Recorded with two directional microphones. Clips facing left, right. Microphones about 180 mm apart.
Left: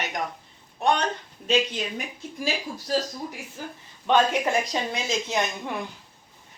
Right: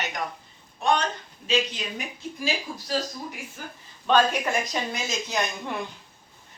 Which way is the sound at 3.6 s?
30° left (ahead or behind).